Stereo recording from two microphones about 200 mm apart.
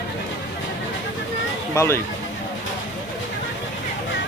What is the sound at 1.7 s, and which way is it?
Speech, 15° left (ahead or behind).